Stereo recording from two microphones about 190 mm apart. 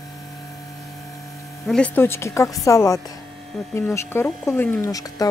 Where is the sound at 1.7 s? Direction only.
10° left (ahead or behind).